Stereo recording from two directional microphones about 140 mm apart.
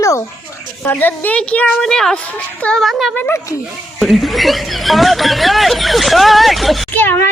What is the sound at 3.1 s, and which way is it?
Speech, 15° left (ahead or behind).